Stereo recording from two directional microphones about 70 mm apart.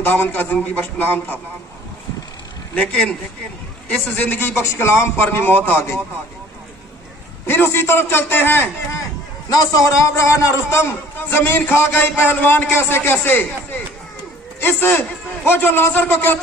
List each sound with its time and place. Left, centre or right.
0.0 s a man's voice: left
2.7 s a man's voice: centre
4.3 s a man's voice: left
7.4 s a man's voice: left
9.5 s a man's voice: left
11.2 s a man's voice: left